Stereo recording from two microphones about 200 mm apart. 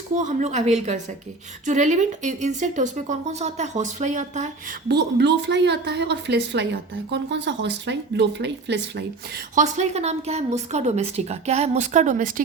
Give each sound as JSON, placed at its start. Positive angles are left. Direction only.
{"t": 0.1, "sound": "speech", "side_deg": -40}
{"t": 4.9, "sound": "speech", "side_deg": -55}
{"t": 9.6, "sound": "speech", "side_deg": -35}